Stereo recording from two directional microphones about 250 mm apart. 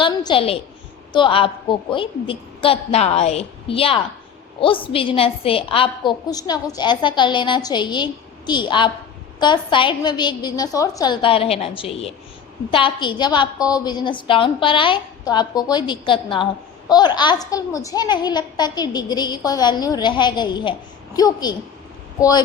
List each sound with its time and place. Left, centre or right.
0.0 s a woman's voice: centre